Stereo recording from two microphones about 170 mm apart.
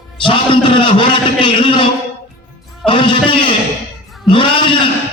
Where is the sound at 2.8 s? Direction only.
30° left (ahead or behind).